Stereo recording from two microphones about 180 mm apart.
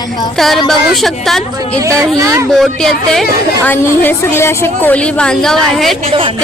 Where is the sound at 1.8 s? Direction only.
15° right (ahead or behind).